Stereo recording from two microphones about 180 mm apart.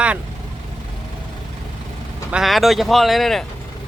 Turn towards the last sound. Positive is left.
turn(degrees=0)  # may be behind; listen again after turning